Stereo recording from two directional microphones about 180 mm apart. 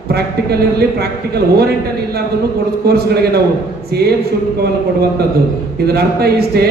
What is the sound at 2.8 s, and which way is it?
Speech, 60° right (ahead or behind).